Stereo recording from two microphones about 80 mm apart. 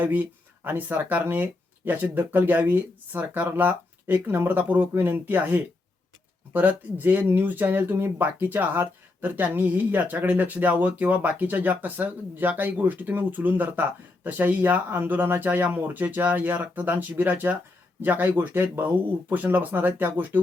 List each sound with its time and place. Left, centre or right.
0.0 s speech: right